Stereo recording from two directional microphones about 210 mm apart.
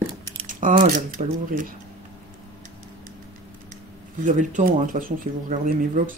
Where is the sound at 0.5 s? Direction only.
40° right (ahead or behind).